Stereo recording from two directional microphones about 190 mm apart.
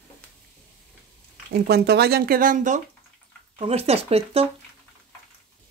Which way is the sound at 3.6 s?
30° right (ahead or behind).